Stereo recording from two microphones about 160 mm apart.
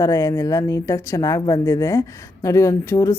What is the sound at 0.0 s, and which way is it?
Speech, 20° left (ahead or behind).